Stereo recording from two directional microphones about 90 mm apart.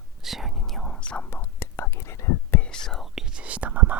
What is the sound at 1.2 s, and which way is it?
Whispering, 25° left (ahead or behind).